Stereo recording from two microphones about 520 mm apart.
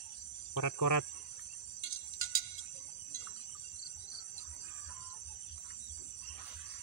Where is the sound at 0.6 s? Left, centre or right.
Left.